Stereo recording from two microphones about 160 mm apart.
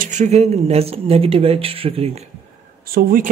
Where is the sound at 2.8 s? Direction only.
65° right (ahead or behind).